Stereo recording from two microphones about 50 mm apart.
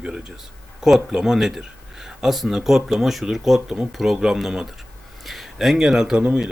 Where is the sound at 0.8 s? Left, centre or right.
Centre.